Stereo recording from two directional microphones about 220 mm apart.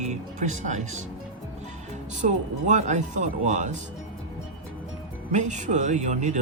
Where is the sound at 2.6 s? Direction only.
35° right (ahead or behind).